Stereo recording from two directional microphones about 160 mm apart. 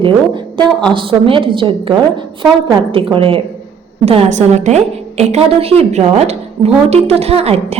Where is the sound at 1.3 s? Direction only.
30° right (ahead or behind).